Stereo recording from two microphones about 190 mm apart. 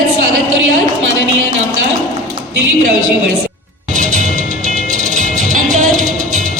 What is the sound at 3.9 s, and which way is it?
Music, 40° right (ahead or behind).